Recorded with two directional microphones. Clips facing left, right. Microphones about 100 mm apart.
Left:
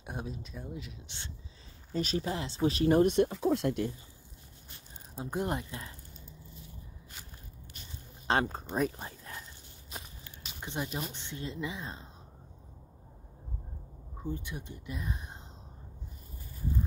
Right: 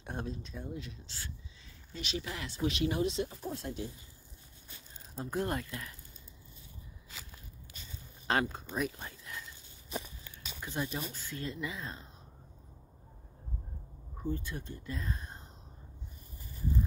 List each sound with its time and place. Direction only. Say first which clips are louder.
0.0 s speech: even; 10° left (ahead or behind)
1.0 s speech: even; 20° left (ahead or behind)
1.9 s speech: left 7 dB; 40° left (ahead or behind); by 3.9 s 65° left (ahead or behind)
5.1 s speech: left 1 dB; 20° left (ahead or behind)
8.3 s speech: left 2 dB; 35° left (ahead or behind)
10.6 s speech: left 1 dB; 20° left (ahead or behind)
14.2 s speech: right 1 dB; 15° left (ahead or behind)